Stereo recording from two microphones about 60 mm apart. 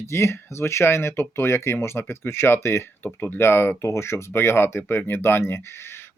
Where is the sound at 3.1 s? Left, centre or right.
Left.